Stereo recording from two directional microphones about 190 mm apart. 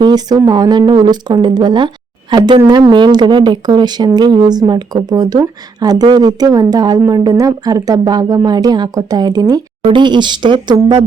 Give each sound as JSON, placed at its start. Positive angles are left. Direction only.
{"t": 0.0, "sound": "a woman's voice", "side_deg": -20}